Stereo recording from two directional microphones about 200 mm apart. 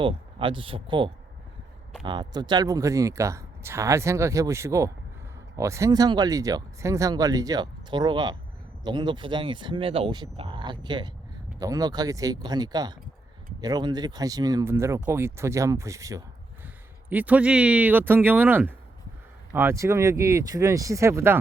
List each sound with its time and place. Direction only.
0.0 s speech: 25° right (ahead or behind)